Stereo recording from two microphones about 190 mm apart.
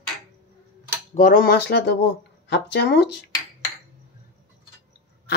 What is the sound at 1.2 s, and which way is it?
Speech, 45° left (ahead or behind).